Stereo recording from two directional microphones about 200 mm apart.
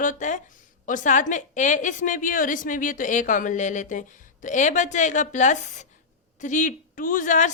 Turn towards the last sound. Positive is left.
turn(degrees=40)  # may be behind; listen again after turning